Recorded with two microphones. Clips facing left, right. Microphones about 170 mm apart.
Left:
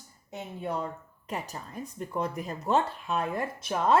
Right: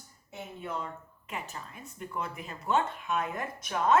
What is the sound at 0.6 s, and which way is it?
A woman's voice, 35° left (ahead or behind).